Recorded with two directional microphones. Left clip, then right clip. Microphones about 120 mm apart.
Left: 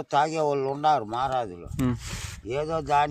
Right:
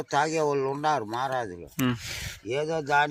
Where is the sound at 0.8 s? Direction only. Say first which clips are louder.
Left 7 dB; 55° left (ahead or behind).